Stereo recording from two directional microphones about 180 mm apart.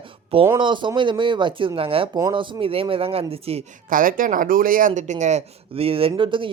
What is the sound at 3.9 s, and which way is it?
Speech, 50° right (ahead or behind).